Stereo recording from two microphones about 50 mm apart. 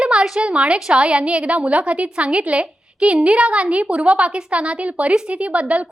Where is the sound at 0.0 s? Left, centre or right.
Centre.